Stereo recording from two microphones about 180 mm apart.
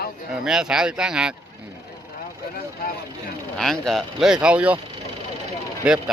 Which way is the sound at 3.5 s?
5° left (ahead or behind).